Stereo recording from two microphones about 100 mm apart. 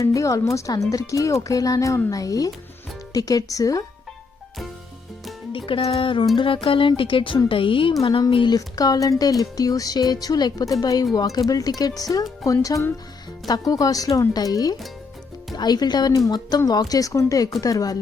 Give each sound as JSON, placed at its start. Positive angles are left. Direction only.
{"t": 0.0, "sound": "speech", "side_deg": 30}
{"t": 5.5, "sound": "speech", "side_deg": 60}
{"t": 8.5, "sound": "speech", "side_deg": 40}
{"t": 13.5, "sound": "a woman's voice", "side_deg": 35}